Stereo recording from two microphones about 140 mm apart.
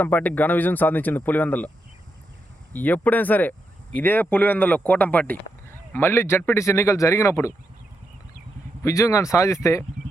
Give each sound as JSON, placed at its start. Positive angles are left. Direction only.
{"t": 0.0, "sound": "speech", "side_deg": 10}
{"t": 2.7, "sound": "speech", "side_deg": 10}
{"t": 8.8, "sound": "speech", "side_deg": 20}